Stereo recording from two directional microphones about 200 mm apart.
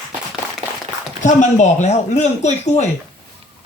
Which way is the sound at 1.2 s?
35° left (ahead or behind).